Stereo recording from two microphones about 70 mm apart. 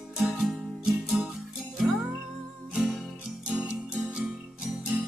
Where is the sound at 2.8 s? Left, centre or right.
Centre.